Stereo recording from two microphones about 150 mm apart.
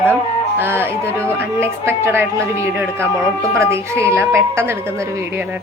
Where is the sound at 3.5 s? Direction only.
20° right (ahead or behind).